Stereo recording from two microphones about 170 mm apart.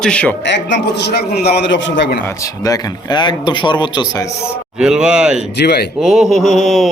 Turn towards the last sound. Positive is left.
turn(degrees=0)  # may be behind; listen again after turning